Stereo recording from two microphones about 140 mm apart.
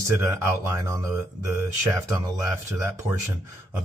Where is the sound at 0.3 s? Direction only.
20° right (ahead or behind).